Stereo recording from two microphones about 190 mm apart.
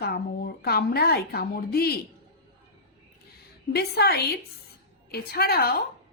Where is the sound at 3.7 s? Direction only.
55° left (ahead or behind).